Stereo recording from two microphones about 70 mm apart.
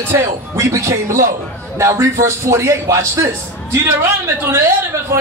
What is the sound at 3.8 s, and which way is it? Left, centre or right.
Speech, right.